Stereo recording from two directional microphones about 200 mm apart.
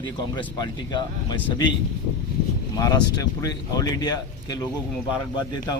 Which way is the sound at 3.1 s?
20° left (ahead or behind).